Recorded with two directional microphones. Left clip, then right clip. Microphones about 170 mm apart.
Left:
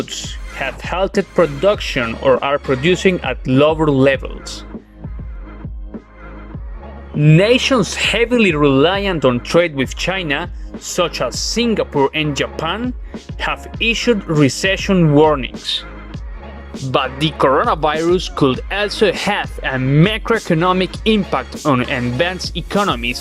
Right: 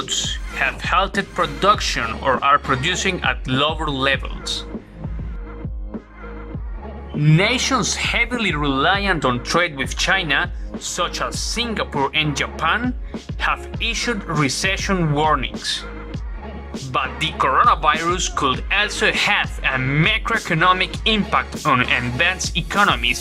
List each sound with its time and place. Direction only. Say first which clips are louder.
0.0 s speech: right 3 dB; 25° left (ahead or behind)
7.2 s speech: left 6 dB; 20° left (ahead or behind)
16.9 s speech: left 4 dB; 30° left (ahead or behind)
20.1 s speech: left 2 dB; 35° left (ahead or behind)